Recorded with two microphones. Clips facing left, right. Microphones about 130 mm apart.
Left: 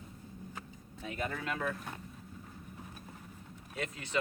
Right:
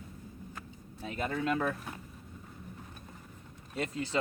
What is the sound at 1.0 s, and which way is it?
Speech, 35° right (ahead or behind).